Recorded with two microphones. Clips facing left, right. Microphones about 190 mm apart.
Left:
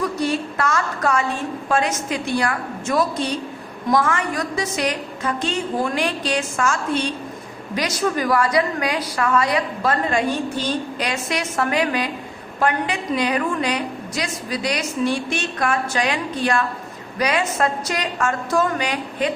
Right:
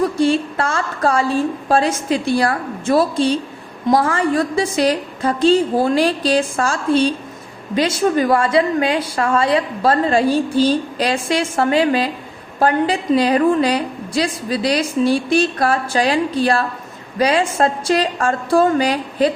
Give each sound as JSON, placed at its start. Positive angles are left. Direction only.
{"t": 0.2, "sound": "a woman's voice", "side_deg": -30}